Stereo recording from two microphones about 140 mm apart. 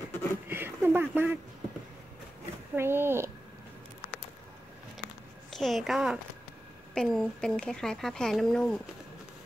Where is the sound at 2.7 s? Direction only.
15° right (ahead or behind).